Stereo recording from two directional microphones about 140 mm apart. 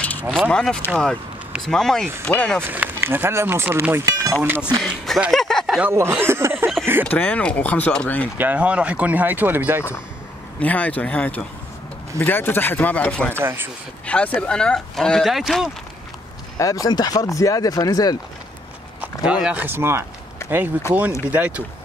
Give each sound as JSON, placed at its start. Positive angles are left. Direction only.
{"t": 0.0, "sound": "a sound", "side_deg": 10}
{"t": 0.4, "sound": "speech", "side_deg": 5}
{"t": 2.6, "sound": "speech", "side_deg": -15}
{"t": 5.0, "sound": "speech", "side_deg": 0}
{"t": 5.8, "sound": "speech", "side_deg": -15}
{"t": 7.1, "sound": "speech", "side_deg": 10}
{"t": 8.4, "sound": "speech", "side_deg": -10}
{"t": 10.6, "sound": "speech", "side_deg": 10}
{"t": 13.4, "sound": "speech", "side_deg": -15}
{"t": 14.0, "sound": "speech", "side_deg": 10}
{"t": 16.5, "sound": "speech", "side_deg": 25}
{"t": 19.2, "sound": "speech", "side_deg": -5}